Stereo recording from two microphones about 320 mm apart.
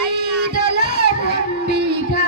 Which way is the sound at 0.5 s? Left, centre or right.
Right.